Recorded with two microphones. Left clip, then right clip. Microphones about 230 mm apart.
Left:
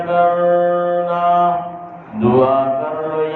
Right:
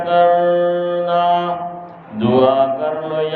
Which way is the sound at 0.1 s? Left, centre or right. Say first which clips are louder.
Right 1 dB; right.